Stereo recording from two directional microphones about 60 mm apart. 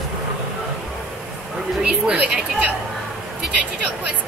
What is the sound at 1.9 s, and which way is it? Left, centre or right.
Speech, right.